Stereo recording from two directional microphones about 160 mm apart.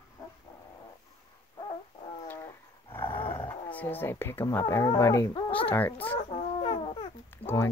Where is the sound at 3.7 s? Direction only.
10° left (ahead or behind).